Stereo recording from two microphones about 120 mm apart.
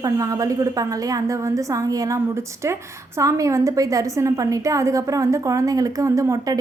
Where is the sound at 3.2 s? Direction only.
25° right (ahead or behind).